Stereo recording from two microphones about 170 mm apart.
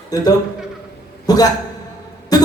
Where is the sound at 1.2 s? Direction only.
20° left (ahead or behind).